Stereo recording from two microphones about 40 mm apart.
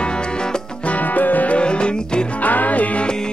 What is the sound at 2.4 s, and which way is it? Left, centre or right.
Music, left.